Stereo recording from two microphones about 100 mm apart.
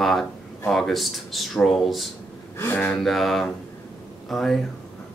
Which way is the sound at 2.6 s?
20° left (ahead or behind).